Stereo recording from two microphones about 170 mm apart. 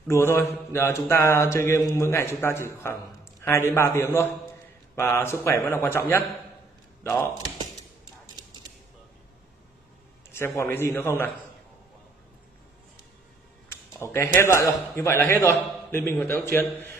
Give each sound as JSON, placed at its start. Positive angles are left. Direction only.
{"t": 0.1, "sound": "mantra", "side_deg": 15}
{"t": 7.0, "sound": "speech", "side_deg": 15}
{"t": 10.3, "sound": "mantra", "side_deg": 15}
{"t": 13.7, "sound": "a sound", "side_deg": 15}
{"t": 15.0, "sound": "mantra", "side_deg": 15}